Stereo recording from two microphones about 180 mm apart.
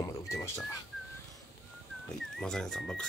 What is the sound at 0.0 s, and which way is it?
Livestock, 15° left (ahead or behind).